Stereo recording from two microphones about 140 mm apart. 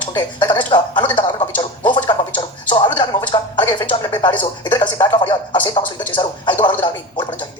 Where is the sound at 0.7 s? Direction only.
35° left (ahead or behind).